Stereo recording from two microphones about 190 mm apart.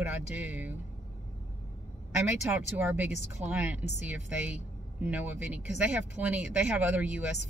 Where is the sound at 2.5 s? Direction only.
10° right (ahead or behind).